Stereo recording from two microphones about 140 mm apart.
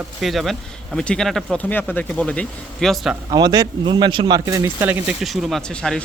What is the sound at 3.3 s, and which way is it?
Speech, 30° right (ahead or behind).